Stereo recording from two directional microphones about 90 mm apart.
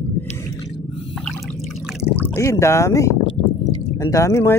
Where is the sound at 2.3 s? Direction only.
35° left (ahead or behind).